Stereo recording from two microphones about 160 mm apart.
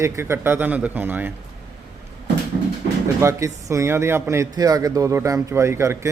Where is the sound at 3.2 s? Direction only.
20° right (ahead or behind).